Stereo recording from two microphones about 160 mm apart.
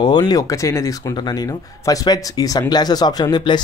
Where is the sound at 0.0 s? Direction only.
25° left (ahead or behind).